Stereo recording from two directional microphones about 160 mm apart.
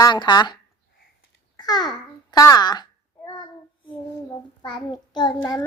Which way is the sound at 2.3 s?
25° left (ahead or behind).